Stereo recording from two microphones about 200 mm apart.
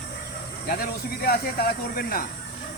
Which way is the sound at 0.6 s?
50° left (ahead or behind).